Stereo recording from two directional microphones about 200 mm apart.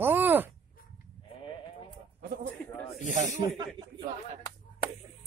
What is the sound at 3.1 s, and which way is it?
Speech, 35° right (ahead or behind).